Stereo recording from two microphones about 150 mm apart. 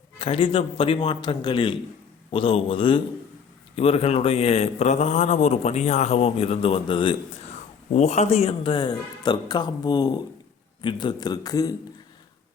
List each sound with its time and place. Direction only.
0.2 s a man's voice: 35° left (ahead or behind)
7.9 s a man's voice: 50° left (ahead or behind); by 11.7 s 25° left (ahead or behind)